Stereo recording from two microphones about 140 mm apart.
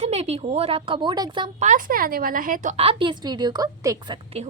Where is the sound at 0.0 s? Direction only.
50° right (ahead or behind); by 1.5 s 35° right (ahead or behind).